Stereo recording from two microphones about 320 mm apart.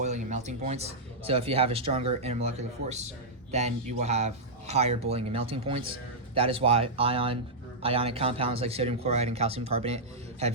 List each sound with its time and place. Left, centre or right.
0.0 s a man's voice: right